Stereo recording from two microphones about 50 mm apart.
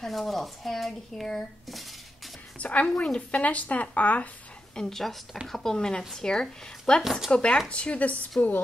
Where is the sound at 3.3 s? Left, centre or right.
Left.